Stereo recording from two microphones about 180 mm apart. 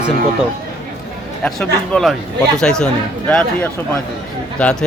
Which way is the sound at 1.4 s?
5° left (ahead or behind).